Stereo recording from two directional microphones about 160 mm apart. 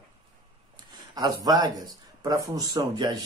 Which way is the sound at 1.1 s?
25° right (ahead or behind).